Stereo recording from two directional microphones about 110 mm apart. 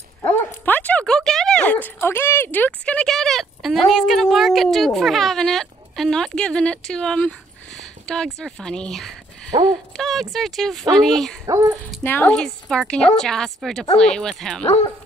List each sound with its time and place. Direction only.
0.2 s dog: 20° left (ahead or behind)
7.8 s a woman's voice: 5° left (ahead or behind)
12.0 s speech: 20° left (ahead or behind)
12.4 s a woman's voice: 5° left (ahead or behind)